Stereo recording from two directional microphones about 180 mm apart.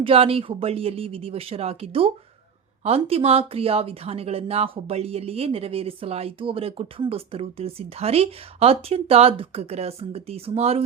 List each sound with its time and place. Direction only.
0.0 s speech: 30° right (ahead or behind)